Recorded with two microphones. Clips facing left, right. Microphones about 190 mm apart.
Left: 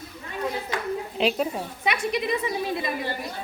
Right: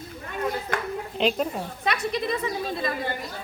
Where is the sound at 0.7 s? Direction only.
50° right (ahead or behind).